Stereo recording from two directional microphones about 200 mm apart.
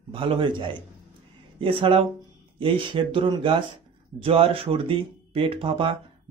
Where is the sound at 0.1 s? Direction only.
25° right (ahead or behind).